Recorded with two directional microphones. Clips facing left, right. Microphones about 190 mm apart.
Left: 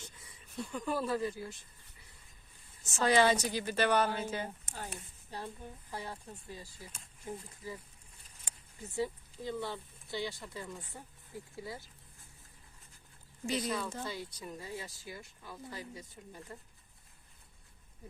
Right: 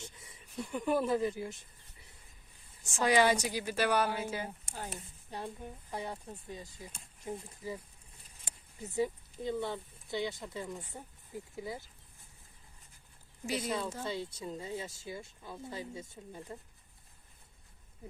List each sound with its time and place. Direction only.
0.0 s a sound: 25° right (ahead or behind)
0.6 s speech: 20° right (ahead or behind)
3.0 s a woman's voice: 10° right (ahead or behind)
5.9 s speech: 20° right (ahead or behind)
8.8 s speech: 20° right (ahead or behind)
13.4 s a woman's voice: 5° right (ahead or behind)
14.0 s speech: 25° right (ahead or behind)